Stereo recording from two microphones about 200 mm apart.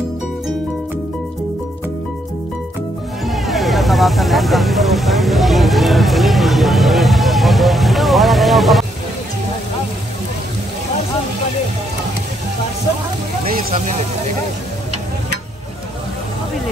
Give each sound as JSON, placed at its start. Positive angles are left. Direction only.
{"t": 3.3, "sound": "vehicle", "side_deg": 0}
{"t": 13.7, "sound": "speech", "side_deg": -35}